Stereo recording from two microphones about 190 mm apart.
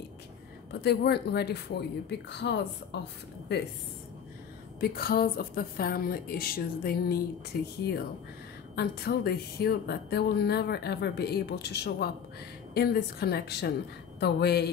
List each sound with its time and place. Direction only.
0.7 s speech: 60° left (ahead or behind)
4.7 s a woman's voice: 55° left (ahead or behind)